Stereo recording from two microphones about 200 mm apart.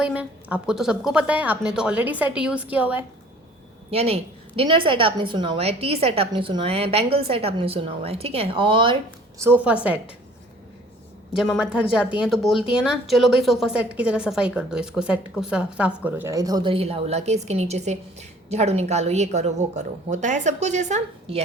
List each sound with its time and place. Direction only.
0.0 s a woman's voice: 5° right (ahead or behind)
3.9 s a woman's voice: 30° right (ahead or behind)
9.4 s a woman's voice: 10° right (ahead or behind)
11.3 s a woman's voice: 5° right (ahead or behind); by 21.4 s 35° right (ahead or behind)